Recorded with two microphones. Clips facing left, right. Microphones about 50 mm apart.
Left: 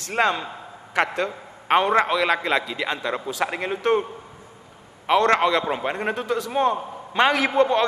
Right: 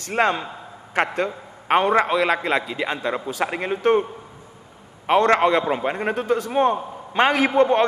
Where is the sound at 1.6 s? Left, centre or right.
Centre.